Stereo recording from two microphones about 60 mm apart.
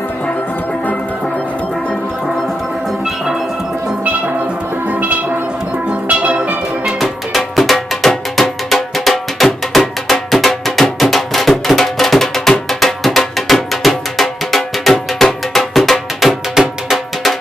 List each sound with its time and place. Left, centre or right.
5.9 s music: right
7.0 s music: centre